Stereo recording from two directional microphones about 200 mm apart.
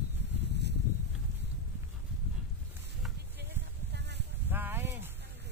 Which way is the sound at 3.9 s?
60° right (ahead or behind).